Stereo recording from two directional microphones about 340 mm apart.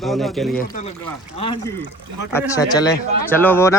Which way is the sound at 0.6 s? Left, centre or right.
Left.